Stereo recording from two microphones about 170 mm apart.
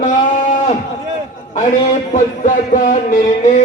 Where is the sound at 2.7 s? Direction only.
50° left (ahead or behind).